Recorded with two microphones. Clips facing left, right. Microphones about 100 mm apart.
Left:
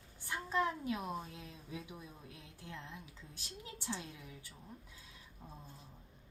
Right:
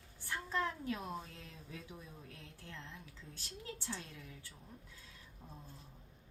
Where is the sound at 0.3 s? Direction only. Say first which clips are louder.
Left 3 dB; 15° left (ahead or behind).